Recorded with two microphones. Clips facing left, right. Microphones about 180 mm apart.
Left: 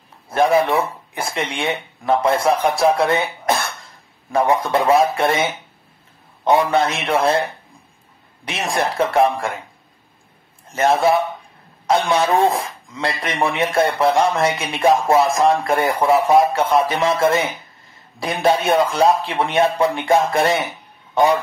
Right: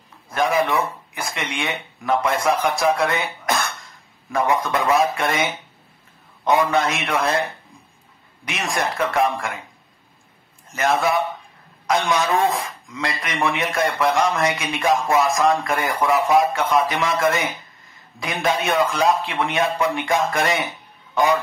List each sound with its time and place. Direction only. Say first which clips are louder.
0.3 s speech: left 4 dB; 30° left (ahead or behind)
6.4 s speech: left 3 dB; 30° left (ahead or behind)
8.5 s speech: left 3 dB; 30° left (ahead or behind)
10.7 s speech: left 4 dB; 30° left (ahead or behind)
21.1 s a sound: left 3 dB; 30° left (ahead or behind)